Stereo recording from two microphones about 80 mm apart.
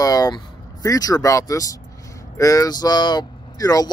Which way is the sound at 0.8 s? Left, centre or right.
Left.